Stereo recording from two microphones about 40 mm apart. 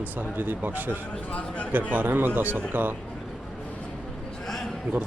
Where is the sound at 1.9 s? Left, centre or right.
Right.